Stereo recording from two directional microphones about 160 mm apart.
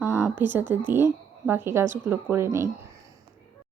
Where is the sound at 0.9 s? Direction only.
15° right (ahead or behind).